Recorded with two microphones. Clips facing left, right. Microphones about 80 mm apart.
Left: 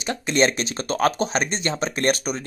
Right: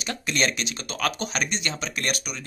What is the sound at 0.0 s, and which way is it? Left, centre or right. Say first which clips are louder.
Speech: left 6 dB; left.